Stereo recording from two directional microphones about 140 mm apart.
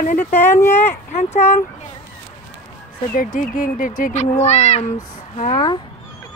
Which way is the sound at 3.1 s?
75° left (ahead or behind).